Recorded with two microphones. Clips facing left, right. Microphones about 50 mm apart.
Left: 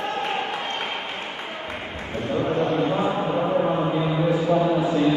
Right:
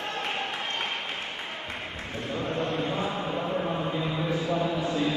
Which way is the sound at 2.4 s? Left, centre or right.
Centre.